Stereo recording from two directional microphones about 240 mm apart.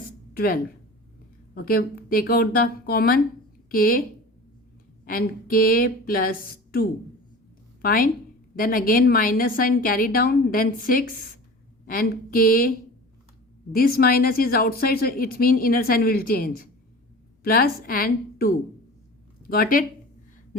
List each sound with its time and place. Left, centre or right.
0.3 s speech: left
5.0 s speech: left
13.7 s speech: left